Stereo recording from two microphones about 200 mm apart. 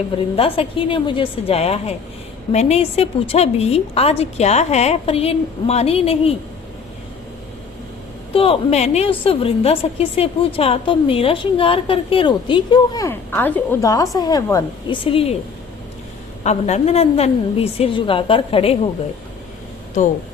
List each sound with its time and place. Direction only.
0.3 s a woman's voice: 30° left (ahead or behind)
8.3 s a woman's voice: 30° left (ahead or behind)
15.0 s a woman's voice: 30° left (ahead or behind)
16.4 s a woman's voice: 35° left (ahead or behind)